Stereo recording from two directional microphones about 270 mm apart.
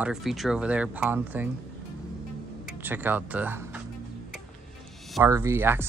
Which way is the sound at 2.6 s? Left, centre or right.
Centre.